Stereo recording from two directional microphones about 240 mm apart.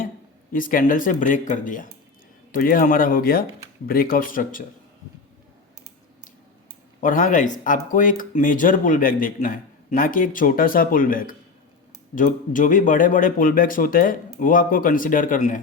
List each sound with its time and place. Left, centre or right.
0.5 s speech: left
7.0 s speech: left